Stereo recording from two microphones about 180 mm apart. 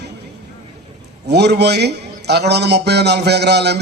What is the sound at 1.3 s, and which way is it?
A man's voice, 65° right (ahead or behind).